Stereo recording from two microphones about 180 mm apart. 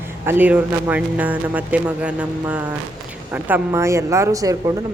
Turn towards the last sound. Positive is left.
turn(degrees=-15)  # may be behind; listen again after turning